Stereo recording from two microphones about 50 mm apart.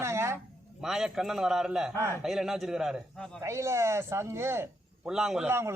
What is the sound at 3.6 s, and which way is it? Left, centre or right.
Speech, right.